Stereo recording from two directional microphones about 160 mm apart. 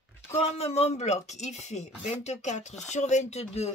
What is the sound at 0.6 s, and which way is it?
Speech, 40° left (ahead or behind).